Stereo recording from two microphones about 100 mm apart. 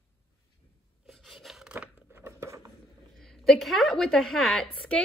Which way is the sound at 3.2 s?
5° left (ahead or behind).